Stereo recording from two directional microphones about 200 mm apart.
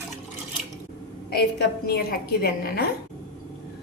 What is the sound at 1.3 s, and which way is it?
A woman's voice, 55° left (ahead or behind).